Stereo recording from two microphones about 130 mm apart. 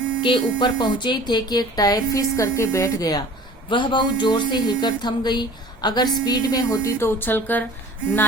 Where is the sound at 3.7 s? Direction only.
35° left (ahead or behind).